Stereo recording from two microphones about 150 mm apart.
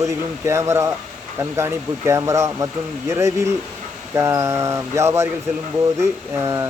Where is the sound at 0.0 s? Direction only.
20° right (ahead or behind).